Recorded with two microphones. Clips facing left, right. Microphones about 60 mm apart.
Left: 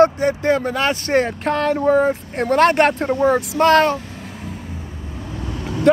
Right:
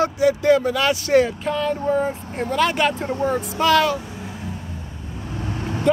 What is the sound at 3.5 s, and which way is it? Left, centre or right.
Speech, left.